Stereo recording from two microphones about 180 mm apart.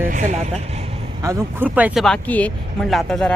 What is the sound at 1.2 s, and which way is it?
Speech, 15° right (ahead or behind).